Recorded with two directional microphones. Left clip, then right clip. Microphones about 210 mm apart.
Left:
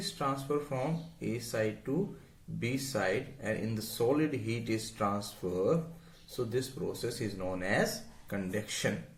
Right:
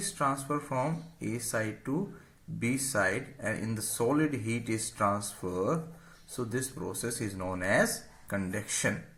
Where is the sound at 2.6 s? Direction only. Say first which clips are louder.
Right 4 dB; 50° right (ahead or behind).